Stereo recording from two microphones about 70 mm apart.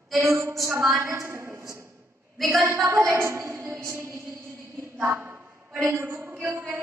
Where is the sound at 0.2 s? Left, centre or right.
Right.